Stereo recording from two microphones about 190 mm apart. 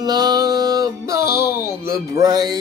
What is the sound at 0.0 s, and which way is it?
Music, 20° right (ahead or behind).